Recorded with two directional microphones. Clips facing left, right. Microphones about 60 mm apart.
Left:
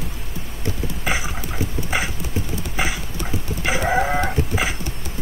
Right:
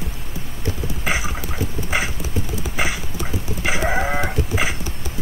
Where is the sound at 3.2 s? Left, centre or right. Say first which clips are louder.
Even; centre.